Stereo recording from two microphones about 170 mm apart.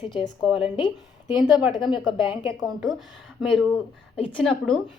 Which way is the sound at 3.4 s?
Centre (ahead or behind).